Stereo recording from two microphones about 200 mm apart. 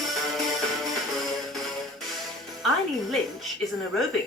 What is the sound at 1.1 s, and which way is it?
Music, centre (ahead or behind).